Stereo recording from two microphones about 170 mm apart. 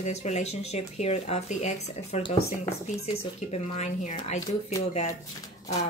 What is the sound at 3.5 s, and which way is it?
Speech, 45° left (ahead or behind).